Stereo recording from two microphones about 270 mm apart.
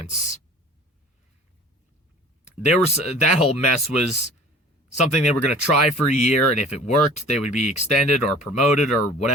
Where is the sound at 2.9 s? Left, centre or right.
Left.